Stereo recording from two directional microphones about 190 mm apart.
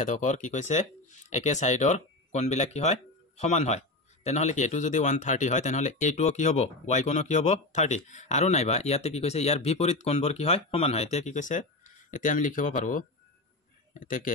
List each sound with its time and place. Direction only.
0.0 s speech: 40° left (ahead or behind)